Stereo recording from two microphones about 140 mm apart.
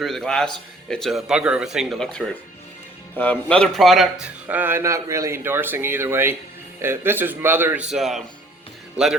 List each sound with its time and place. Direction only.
0.0 s a man's voice: 5° left (ahead or behind)
4.4 s speech: 15° right (ahead or behind)
7.9 s a man's voice: centre (ahead or behind)